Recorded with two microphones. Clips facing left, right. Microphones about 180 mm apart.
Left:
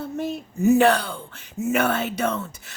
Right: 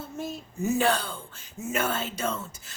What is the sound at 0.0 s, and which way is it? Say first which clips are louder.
Speech: left 7 dB; 65° left (ahead or behind).